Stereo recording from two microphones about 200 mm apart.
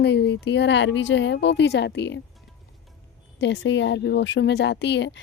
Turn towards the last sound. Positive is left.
turn(degrees=60)  # may be behind; listen again after turning